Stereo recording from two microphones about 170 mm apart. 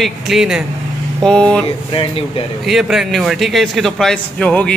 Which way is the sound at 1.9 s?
35° left (ahead or behind).